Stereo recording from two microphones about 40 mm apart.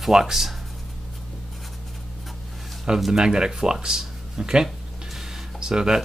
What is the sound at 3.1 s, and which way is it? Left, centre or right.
Speech, centre.